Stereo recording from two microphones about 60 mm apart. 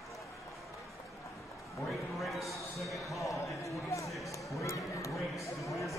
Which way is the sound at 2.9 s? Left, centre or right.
Left.